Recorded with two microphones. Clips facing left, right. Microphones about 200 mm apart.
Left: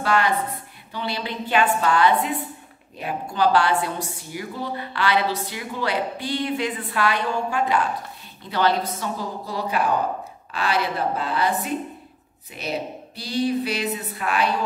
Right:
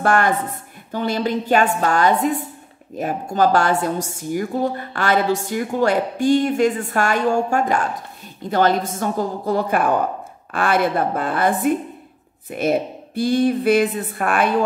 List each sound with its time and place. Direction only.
0.0 s a woman's voice: 50° right (ahead or behind)